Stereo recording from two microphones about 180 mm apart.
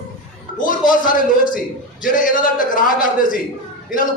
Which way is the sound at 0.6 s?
50° left (ahead or behind).